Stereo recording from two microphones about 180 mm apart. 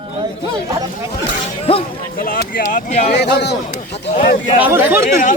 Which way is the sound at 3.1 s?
65° left (ahead or behind).